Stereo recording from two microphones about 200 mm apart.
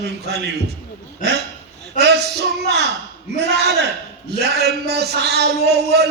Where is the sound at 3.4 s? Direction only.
55° right (ahead or behind).